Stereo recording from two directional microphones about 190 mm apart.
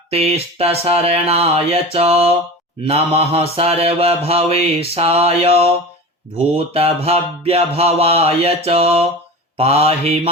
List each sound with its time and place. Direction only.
0.1 s mantra: 30° right (ahead or behind)
6.7 s mantra: 30° right (ahead or behind)